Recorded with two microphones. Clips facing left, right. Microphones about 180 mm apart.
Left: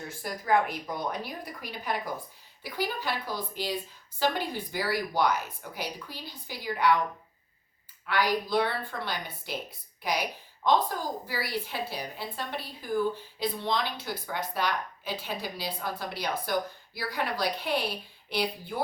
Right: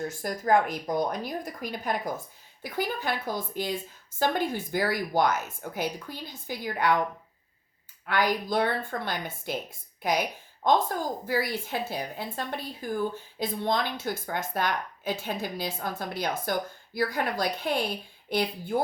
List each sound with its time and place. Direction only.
0.1 s speech: 45° right (ahead or behind)
8.0 s a woman's voice: 50° right (ahead or behind)